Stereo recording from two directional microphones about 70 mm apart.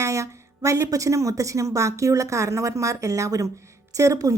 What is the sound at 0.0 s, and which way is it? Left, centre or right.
Speech, right.